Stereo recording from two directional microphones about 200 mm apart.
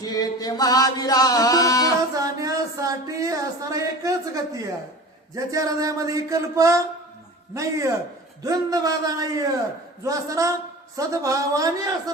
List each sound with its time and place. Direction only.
0.0 s music: 20° left (ahead or behind)
2.1 s a sound: 15° right (ahead or behind)
5.3 s speech: 15° right (ahead or behind)